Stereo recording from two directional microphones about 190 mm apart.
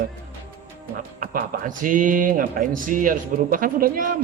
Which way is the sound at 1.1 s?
45° right (ahead or behind).